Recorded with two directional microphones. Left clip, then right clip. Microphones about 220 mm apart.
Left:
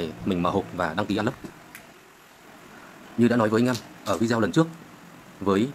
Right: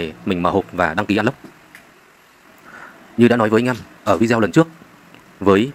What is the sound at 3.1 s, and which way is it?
Speech, 25° right (ahead or behind).